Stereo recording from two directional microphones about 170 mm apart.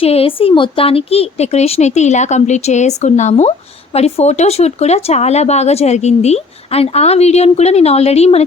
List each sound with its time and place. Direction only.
0.0 s speech: 35° left (ahead or behind)